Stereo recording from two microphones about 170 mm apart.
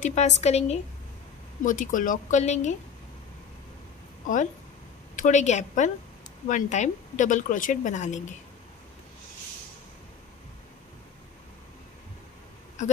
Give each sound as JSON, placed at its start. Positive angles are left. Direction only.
{"t": 0.0, "sound": "a woman's voice", "side_deg": 45}
{"t": 1.6, "sound": "a woman's voice", "side_deg": 50}
{"t": 5.1, "sound": "a woman's voice", "side_deg": 45}